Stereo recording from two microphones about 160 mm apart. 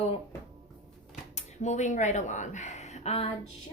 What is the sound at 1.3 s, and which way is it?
Speech, 45° left (ahead or behind).